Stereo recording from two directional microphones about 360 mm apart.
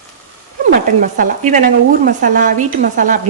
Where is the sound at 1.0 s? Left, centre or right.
Right.